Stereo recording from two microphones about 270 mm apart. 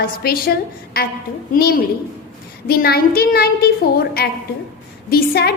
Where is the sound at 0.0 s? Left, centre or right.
Left.